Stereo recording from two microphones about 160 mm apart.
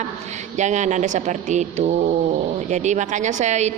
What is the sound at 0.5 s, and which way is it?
A woman's voice, 50° right (ahead or behind).